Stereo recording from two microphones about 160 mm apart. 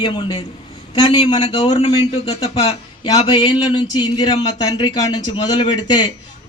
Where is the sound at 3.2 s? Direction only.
25° left (ahead or behind).